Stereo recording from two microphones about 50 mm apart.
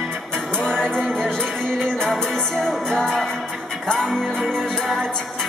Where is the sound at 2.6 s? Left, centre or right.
Centre.